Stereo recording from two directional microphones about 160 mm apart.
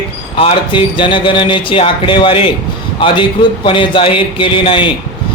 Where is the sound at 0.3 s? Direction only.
35° left (ahead or behind).